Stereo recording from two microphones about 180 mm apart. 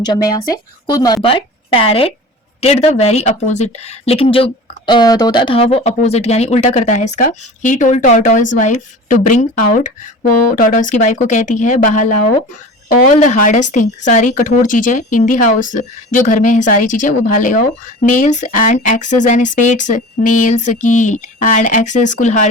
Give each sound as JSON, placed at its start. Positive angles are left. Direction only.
{"t": 0.0, "sound": "speech", "side_deg": 20}